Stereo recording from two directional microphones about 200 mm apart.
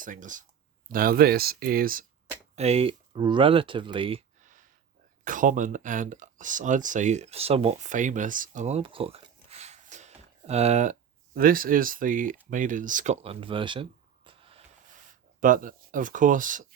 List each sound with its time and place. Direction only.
0.0 s speech: 40° right (ahead or behind)
2.6 s speech: 30° right (ahead or behind)
5.2 s speech: 40° right (ahead or behind)
11.3 s speech: 45° right (ahead or behind); by 13.8 s 25° right (ahead or behind)
14.3 s a sound: 25° right (ahead or behind)
15.4 s speech: 40° right (ahead or behind)